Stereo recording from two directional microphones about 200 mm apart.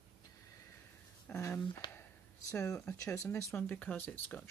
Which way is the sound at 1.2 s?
10° left (ahead or behind).